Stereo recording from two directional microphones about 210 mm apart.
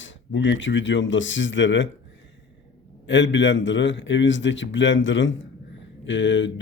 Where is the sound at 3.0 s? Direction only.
60° left (ahead or behind).